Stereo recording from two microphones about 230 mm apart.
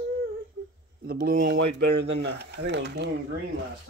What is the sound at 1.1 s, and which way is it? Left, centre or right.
Speech, right.